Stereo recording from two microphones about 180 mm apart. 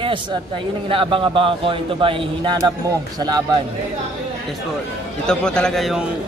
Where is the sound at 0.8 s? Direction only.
30° right (ahead or behind).